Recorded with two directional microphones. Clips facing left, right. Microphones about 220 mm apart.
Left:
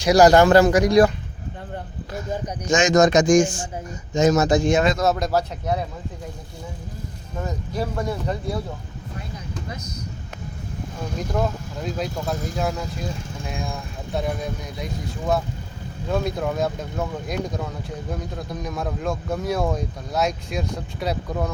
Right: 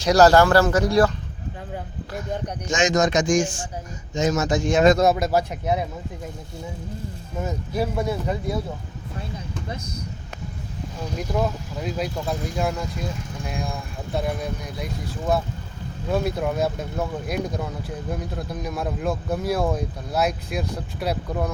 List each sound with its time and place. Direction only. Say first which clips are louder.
0.0 s speech: left 1 dB; 15° left (ahead or behind)
2.7 s a man's voice: left 4 dB; 45° left (ahead or behind)
5.0 s speech: right 1 dB; 10° right (ahead or behind)
7.3 s speech: right 2 dB; 10° right (ahead or behind)
11.2 s speech: even; 5° right (ahead or behind)
14.1 s speech: even; centre (ahead or behind)
16.0 s speech: even; 5° right (ahead or behind)